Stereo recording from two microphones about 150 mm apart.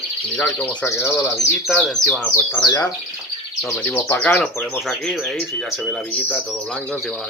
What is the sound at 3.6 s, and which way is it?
Speech, 5° left (ahead or behind).